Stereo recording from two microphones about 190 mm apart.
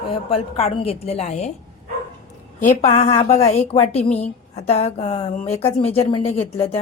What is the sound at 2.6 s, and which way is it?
A woman's voice, 35° left (ahead or behind).